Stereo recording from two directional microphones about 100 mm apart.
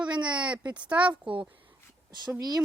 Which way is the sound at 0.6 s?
50° right (ahead or behind).